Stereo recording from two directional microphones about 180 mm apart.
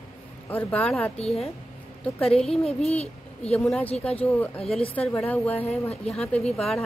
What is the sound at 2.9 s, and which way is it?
Speech, 35° left (ahead or behind).